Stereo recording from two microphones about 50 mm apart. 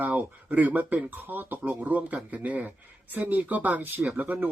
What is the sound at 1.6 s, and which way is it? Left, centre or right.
Speech, right.